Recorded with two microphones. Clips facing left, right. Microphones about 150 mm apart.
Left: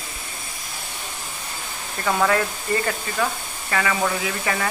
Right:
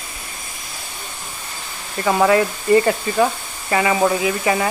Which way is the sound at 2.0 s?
15° right (ahead or behind).